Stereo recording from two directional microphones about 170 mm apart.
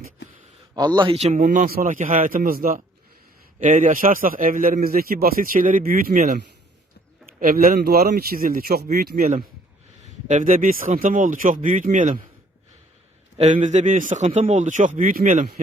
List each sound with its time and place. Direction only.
0.8 s a man's voice: 25° right (ahead or behind); by 9.4 s 60° right (ahead or behind)
10.2 s a man's voice: 45° right (ahead or behind)
13.4 s a man's voice: 45° right (ahead or behind)